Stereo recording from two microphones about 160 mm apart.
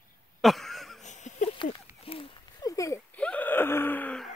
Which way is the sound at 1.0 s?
50° left (ahead or behind).